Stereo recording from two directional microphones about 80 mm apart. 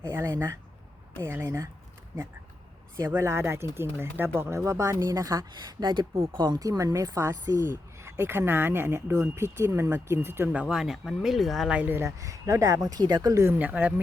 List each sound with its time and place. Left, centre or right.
0.1 s speech: right
3.2 s speech: right
5.8 s speech: right
6.7 s speech: right
10.5 s speech: centre
11.7 s speech: centre
11.9 s speech: right
13.6 s speech: centre